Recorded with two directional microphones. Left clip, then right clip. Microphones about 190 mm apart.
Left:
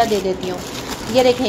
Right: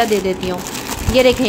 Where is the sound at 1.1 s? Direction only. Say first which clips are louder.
Right 2 dB; 25° right (ahead or behind).